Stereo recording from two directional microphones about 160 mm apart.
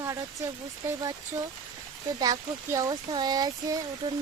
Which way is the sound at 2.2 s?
20° right (ahead or behind).